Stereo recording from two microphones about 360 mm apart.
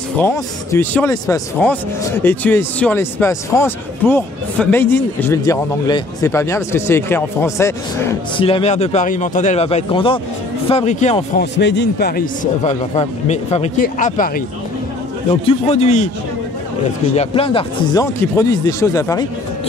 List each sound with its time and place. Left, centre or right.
0.2 s speech: centre
11.5 s speech: left
17.1 s speech: centre